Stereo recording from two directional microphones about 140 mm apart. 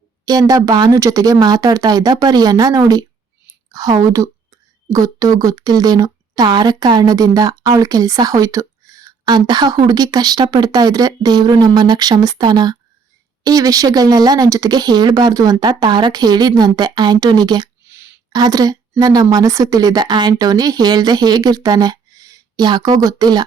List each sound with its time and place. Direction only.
0.3 s speech: 25° right (ahead or behind)